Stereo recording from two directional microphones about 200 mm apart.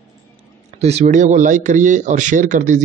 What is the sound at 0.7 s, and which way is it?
A man's voice, 35° right (ahead or behind).